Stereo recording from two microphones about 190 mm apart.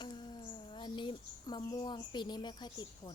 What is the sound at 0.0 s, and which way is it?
Speech, 25° left (ahead or behind).